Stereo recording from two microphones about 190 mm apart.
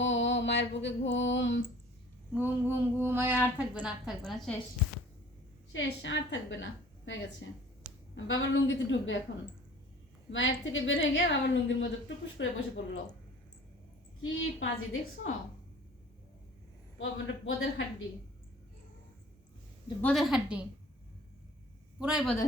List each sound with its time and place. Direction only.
0.0 s a sound: 75° left (ahead or behind)
0.8 s a woman's voice: 75° left (ahead or behind)
2.3 s a woman's voice: 10° right (ahead or behind)
5.7 s a woman's voice: 70° left (ahead or behind)
10.3 s a woman's voice: 80° left
14.2 s speech: 90° left
17.0 s speech: 90° left
20.0 s a woman's voice: 5° left (ahead or behind)
21.9 s speech: 5° right (ahead or behind)